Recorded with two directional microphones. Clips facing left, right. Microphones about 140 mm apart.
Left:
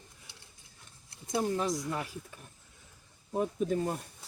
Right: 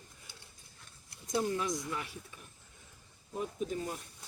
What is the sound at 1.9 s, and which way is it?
Speech, 45° left (ahead or behind).